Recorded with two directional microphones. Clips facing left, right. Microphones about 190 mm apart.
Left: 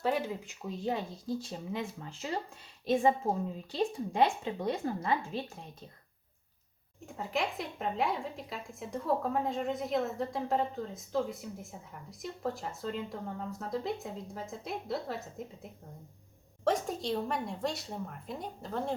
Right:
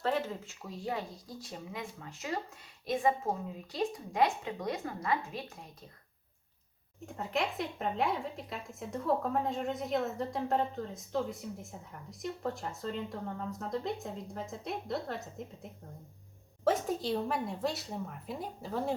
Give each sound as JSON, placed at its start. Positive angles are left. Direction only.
{"t": 0.0, "sound": "speech", "side_deg": 10}
{"t": 7.0, "sound": "speech", "side_deg": 0}